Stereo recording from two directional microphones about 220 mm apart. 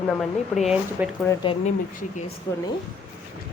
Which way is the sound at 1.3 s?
20° left (ahead or behind).